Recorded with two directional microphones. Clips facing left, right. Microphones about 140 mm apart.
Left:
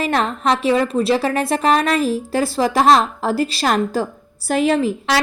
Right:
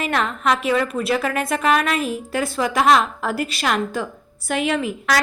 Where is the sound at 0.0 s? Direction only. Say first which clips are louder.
Left 3 dB; 35° left (ahead or behind).